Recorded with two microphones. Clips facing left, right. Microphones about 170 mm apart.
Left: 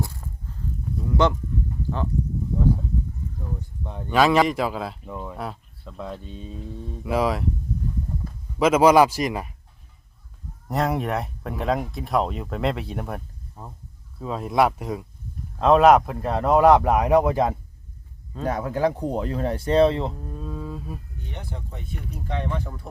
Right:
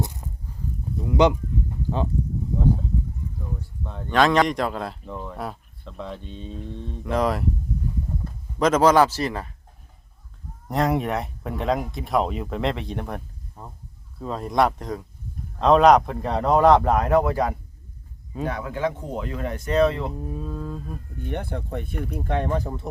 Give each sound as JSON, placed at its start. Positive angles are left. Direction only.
{"t": 0.0, "sound": "walk", "side_deg": -20}
{"t": 1.0, "sound": "speech", "side_deg": -15}
{"t": 3.6, "sound": "speech", "side_deg": 15}
{"t": 8.5, "sound": "speech", "side_deg": 10}
{"t": 10.7, "sound": "speech", "side_deg": 0}
{"t": 18.4, "sound": "speech", "side_deg": 40}
{"t": 20.2, "sound": "speech", "side_deg": -5}
{"t": 21.2, "sound": "speech", "side_deg": -55}